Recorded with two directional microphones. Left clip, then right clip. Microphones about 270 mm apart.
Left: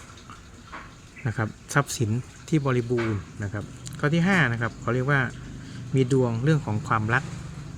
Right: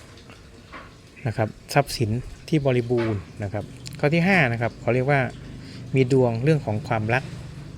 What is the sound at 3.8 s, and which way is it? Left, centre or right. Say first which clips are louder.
Speech: right 4 dB; left.